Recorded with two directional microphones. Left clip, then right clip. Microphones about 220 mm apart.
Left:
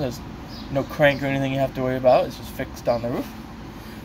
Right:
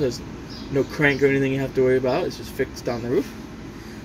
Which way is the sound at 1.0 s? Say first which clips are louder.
Even; 35° left (ahead or behind).